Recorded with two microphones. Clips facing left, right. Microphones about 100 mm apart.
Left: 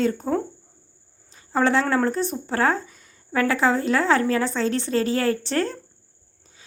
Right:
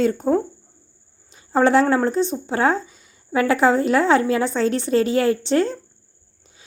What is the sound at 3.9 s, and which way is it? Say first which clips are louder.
Speech: right 3 dB; 25° right (ahead or behind).